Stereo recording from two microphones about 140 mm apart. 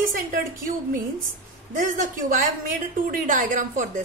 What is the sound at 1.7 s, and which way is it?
A woman's voice, 70° right (ahead or behind).